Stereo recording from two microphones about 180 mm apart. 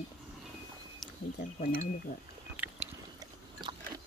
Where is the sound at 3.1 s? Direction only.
20° right (ahead or behind).